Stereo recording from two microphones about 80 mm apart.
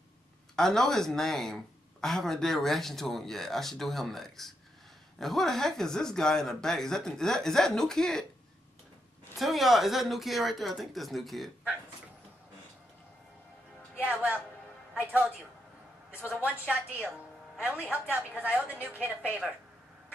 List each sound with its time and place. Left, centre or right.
0.6 s speech: centre
9.4 s speech: centre
14.0 s a woman's voice: centre
16.3 s a woman's voice: right